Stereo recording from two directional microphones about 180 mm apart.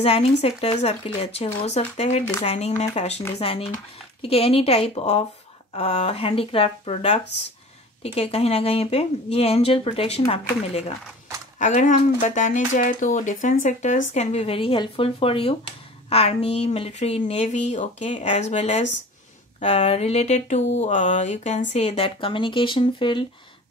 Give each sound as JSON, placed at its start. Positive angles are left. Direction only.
{"t": 0.0, "sound": "speech", "side_deg": 35}